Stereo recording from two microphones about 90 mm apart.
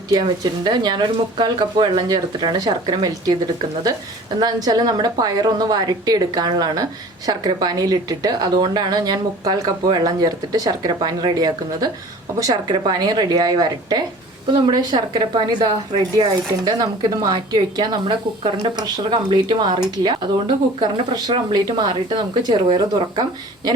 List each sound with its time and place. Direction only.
0.1 s speech: 55° right (ahead or behind)